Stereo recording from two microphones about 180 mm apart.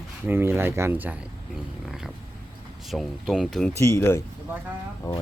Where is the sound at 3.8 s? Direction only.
15° left (ahead or behind).